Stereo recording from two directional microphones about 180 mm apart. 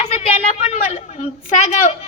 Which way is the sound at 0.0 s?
40° left (ahead or behind).